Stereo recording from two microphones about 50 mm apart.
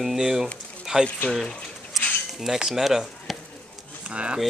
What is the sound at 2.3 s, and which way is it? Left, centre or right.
Speech, centre.